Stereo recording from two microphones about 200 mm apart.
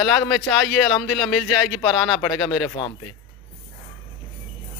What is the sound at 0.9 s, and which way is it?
Speech, centre (ahead or behind).